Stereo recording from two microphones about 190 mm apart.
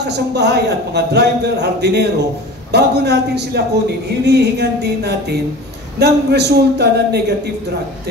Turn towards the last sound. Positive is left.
turn(degrees=-60)  # may be behind; listen again after turning